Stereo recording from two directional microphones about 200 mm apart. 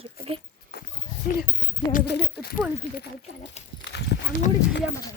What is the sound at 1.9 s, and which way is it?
Speech, 50° left (ahead or behind).